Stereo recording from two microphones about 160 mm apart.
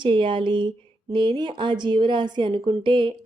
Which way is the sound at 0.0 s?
30° right (ahead or behind).